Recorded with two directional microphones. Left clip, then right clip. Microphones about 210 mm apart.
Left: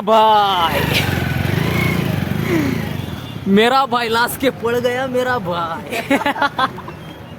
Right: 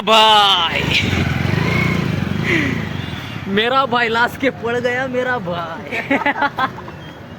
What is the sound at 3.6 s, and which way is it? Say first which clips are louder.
Speech: left 2 dB; 50° left (ahead or behind).